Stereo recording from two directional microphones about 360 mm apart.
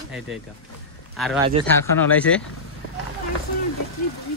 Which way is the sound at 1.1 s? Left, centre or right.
Centre.